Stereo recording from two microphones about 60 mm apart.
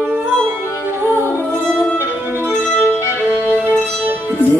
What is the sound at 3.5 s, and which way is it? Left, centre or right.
Music, right.